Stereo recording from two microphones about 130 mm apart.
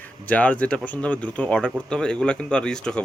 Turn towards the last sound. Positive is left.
turn(degrees=5)  # may be behind; listen again after turning